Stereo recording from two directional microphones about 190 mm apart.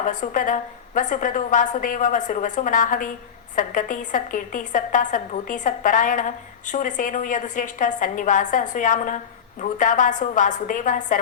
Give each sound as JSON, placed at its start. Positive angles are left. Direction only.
{"t": 0.0, "sound": "a woman's voice", "side_deg": 45}